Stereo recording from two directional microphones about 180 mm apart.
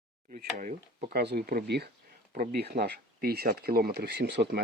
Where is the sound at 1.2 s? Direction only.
65° right (ahead or behind).